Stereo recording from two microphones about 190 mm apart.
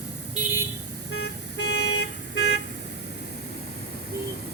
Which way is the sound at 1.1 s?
65° left (ahead or behind).